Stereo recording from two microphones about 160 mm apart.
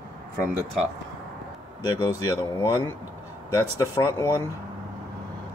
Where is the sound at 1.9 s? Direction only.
20° left (ahead or behind).